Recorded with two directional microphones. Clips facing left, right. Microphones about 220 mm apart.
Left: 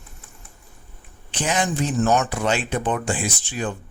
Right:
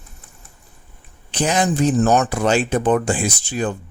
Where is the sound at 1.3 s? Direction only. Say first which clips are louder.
Right 5 dB; 40° right (ahead or behind).